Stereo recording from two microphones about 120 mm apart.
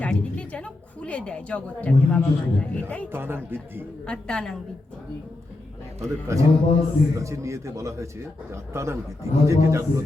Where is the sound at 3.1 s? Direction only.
20° right (ahead or behind).